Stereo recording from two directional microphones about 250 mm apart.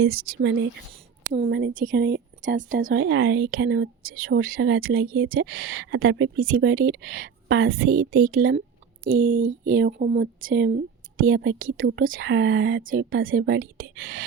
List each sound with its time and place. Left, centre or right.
0.0 s speech: right
1.3 s speech: right
3.0 s speech: right
8.2 s speech: right
11.6 s speech: right
12.2 s speech: right